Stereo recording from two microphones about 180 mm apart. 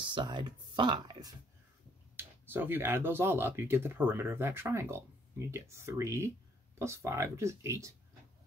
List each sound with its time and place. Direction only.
0.0 s speech: 25° right (ahead or behind)
2.1 s speech: 10° right (ahead or behind)